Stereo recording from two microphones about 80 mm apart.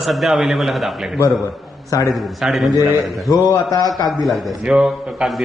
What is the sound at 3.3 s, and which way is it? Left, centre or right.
Speech, left.